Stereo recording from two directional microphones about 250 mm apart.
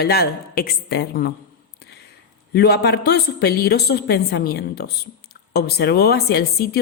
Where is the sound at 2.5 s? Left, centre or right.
Left.